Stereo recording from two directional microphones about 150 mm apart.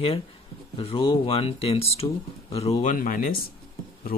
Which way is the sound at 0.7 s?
35° left (ahead or behind).